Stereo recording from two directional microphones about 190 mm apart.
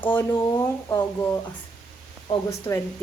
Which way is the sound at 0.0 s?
10° left (ahead or behind).